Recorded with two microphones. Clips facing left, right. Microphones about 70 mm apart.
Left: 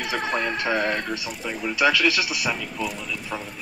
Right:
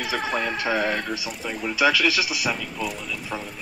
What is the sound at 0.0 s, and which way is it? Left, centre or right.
Speech, centre.